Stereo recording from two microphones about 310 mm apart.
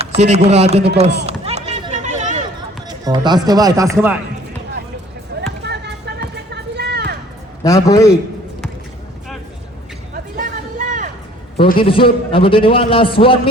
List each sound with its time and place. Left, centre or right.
0.0 s speech: centre
1.3 s run: right
2.8 s speech: centre
5.3 s basketball bounce: right
5.6 s a sound: right
7.6 s a man's voice: centre
10.3 s a sound: right
11.5 s a man's voice: centre